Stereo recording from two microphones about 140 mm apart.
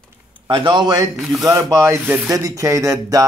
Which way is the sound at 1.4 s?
25° right (ahead or behind).